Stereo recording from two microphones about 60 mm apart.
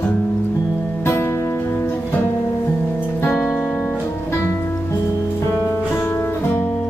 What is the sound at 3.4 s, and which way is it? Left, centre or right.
Music, left.